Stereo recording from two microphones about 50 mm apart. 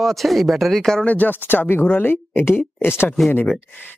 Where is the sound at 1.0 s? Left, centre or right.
Left.